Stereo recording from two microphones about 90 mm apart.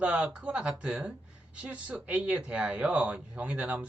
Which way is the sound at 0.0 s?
10° right (ahead or behind).